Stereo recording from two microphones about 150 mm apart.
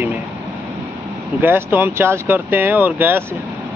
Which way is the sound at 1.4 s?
15° right (ahead or behind).